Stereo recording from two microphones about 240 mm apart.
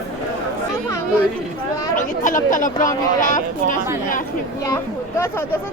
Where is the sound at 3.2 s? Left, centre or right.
Left.